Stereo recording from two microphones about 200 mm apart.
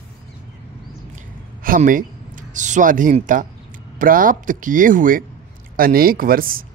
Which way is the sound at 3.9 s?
45° right (ahead or behind).